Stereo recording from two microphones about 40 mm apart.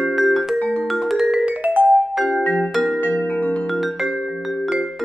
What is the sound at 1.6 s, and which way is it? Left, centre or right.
Music, right.